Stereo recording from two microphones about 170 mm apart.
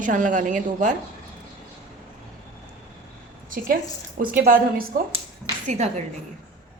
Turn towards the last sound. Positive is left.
turn(degrees=-40)  # may be behind; listen again after turning